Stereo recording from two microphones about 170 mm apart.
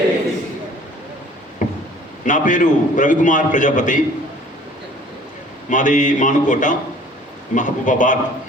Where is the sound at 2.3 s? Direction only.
50° left (ahead or behind).